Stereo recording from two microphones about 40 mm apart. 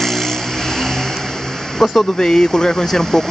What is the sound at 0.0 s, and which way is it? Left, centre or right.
Speech, centre.